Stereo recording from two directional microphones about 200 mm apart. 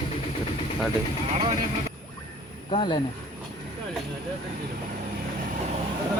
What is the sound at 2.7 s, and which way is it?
Speech, 25° left (ahead or behind).